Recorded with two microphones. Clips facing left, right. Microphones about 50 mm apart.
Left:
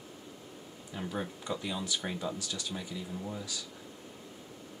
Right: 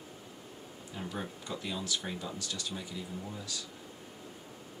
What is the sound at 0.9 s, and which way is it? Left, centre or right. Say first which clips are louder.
Speech: left 3 dB; centre.